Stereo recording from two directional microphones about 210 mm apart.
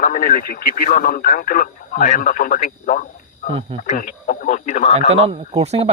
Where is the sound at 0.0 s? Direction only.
40° left (ahead or behind).